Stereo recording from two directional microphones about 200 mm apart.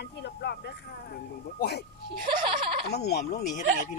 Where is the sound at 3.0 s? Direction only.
55° left (ahead or behind).